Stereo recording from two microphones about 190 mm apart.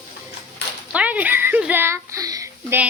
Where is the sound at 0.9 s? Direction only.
5° right (ahead or behind).